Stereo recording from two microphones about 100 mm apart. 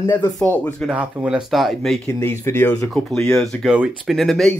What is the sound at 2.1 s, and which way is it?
Speech, 30° left (ahead or behind).